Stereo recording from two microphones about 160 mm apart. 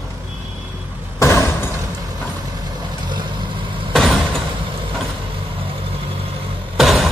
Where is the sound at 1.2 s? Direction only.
15° left (ahead or behind).